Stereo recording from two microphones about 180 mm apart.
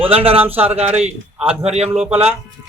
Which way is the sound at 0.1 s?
30° right (ahead or behind).